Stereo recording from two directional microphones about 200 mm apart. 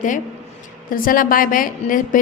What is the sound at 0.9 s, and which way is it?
A woman's voice, 45° left (ahead or behind).